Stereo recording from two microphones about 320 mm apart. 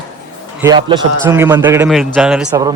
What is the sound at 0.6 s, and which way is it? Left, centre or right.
A man's voice, centre.